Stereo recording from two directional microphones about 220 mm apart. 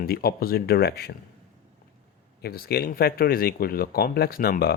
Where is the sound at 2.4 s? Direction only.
45° left (ahead or behind).